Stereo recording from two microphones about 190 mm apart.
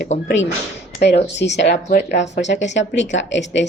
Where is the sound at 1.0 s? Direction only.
60° left (ahead or behind).